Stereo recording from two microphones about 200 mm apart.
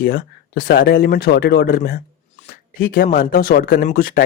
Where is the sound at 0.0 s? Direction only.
50° left (ahead or behind).